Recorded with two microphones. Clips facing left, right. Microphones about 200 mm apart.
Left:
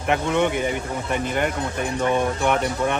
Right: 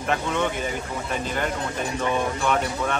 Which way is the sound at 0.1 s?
15° left (ahead or behind).